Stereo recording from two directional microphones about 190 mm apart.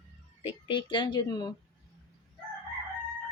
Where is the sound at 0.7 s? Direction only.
25° left (ahead or behind).